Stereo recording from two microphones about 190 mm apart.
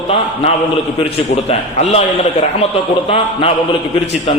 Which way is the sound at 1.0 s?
35° left (ahead or behind).